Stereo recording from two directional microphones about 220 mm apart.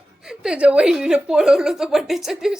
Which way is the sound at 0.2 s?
5° right (ahead or behind).